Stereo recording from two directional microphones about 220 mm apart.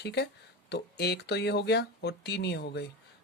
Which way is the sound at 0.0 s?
50° left (ahead or behind).